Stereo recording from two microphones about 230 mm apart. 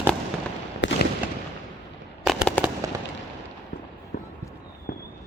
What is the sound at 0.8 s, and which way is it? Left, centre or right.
Fireworks, left.